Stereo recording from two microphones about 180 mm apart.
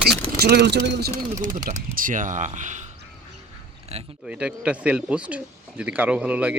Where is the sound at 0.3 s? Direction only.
60° right (ahead or behind).